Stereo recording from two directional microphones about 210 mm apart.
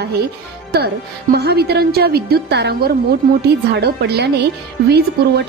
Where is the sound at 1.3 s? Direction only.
50° right (ahead or behind).